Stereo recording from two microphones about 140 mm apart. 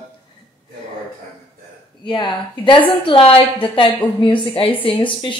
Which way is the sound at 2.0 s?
35° left (ahead or behind).